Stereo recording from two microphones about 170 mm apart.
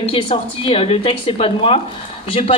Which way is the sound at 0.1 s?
35° left (ahead or behind).